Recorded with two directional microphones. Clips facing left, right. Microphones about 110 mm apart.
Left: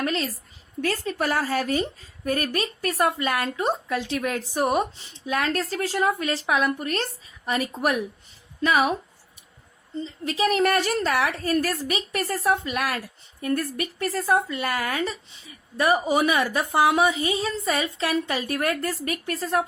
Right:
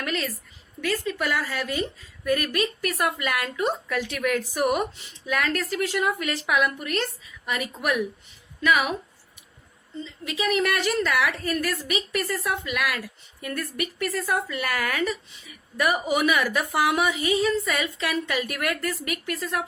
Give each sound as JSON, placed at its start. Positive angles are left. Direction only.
{"t": 0.0, "sound": "a woman's voice", "side_deg": 25}
{"t": 10.0, "sound": "a woman's voice", "side_deg": 35}